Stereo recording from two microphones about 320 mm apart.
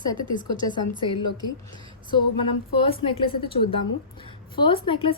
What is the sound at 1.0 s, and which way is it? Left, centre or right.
Speech, left.